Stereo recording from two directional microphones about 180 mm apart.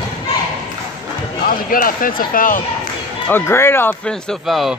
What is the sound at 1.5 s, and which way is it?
Speech, 50° left (ahead or behind).